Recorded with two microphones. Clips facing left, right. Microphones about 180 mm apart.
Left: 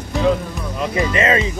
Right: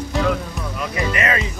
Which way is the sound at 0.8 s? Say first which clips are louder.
Left 4 dB; 25° left (ahead or behind).